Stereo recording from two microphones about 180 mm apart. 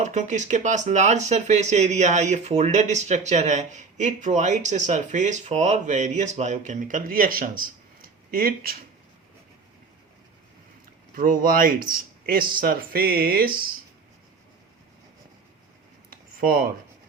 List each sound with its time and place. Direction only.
0.0 s speech: 40° right (ahead or behind)
11.1 s speech: 50° right (ahead or behind)
16.4 s speech: 55° right (ahead or behind)